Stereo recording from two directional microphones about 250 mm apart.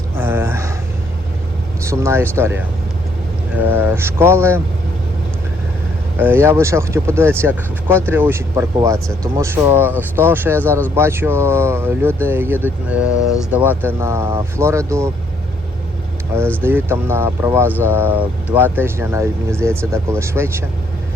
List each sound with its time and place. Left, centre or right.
0.2 s a sound: centre
1.8 s speech: centre
6.1 s speech: centre
16.3 s speech: centre